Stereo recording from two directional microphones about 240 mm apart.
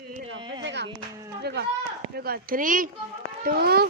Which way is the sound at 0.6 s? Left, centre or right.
Right.